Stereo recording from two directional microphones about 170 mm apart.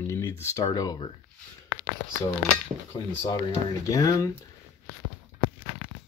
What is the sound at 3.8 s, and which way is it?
Speech, 20° left (ahead or behind).